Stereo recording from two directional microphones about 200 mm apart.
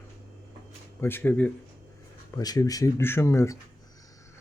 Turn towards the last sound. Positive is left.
turn(degrees=15)  # may be behind; listen again after turning